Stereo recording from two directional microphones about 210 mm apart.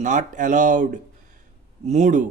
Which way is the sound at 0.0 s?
35° right (ahead or behind).